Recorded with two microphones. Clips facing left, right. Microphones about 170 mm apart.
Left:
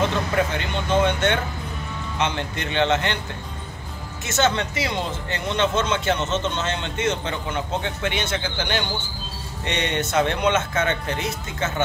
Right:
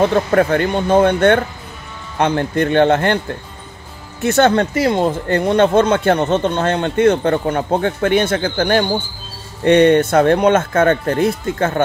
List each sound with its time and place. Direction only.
0.0 s speech: 55° right (ahead or behind)
4.2 s speech: 55° right (ahead or behind)